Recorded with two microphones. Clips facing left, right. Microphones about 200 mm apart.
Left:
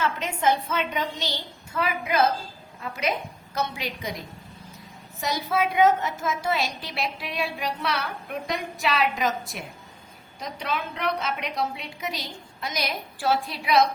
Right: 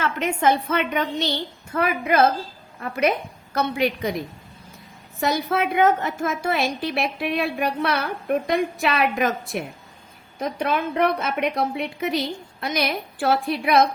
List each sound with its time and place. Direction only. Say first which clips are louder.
0.0 s a woman's voice: right 4 dB; 60° right (ahead or behind)
5.2 s a woman's voice: right 3 dB; 60° right (ahead or behind)